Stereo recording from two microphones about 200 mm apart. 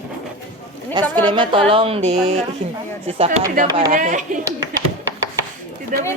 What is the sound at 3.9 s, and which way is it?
Speech, 40° right (ahead or behind).